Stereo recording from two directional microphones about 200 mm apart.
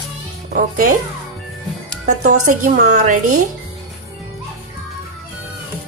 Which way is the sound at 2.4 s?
40° right (ahead or behind).